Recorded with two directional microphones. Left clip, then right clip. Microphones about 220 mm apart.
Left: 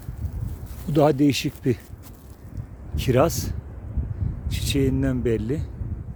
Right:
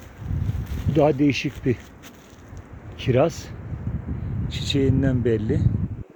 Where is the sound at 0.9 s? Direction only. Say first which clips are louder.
Even; 20° left (ahead or behind).